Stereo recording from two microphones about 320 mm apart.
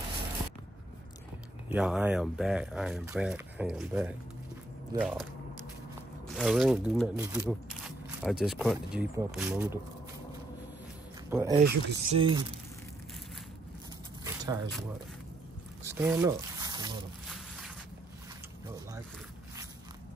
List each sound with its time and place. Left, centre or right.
1.7 s speech: centre
6.2 s speech: centre
11.2 s speech: centre
11.5 s speech: right
14.2 s a sound: centre
15.9 s speech: centre
17.3 s boat: centre